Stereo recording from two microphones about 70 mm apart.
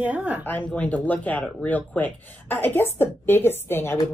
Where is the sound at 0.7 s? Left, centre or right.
Centre.